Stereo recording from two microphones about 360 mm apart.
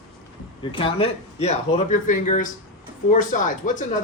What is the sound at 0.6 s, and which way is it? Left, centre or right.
Speech, centre.